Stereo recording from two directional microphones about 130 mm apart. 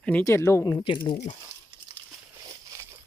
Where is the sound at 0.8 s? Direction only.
40° left (ahead or behind).